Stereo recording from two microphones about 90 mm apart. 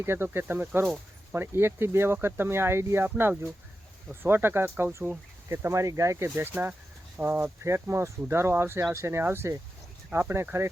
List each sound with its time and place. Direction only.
0.0 s speech: 25° right (ahead or behind)